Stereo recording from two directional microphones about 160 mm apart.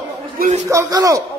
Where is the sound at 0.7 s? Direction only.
20° right (ahead or behind).